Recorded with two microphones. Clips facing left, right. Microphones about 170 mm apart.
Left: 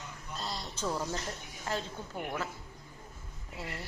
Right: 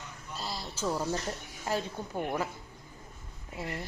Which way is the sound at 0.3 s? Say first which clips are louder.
Right 1 dB; 5° right (ahead or behind).